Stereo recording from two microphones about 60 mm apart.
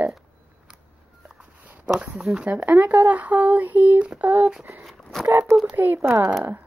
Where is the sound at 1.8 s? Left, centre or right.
Centre.